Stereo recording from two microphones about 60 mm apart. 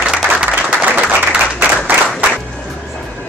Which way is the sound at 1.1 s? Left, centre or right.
Right.